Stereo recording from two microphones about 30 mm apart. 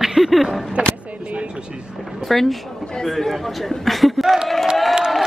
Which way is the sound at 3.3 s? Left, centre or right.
Centre.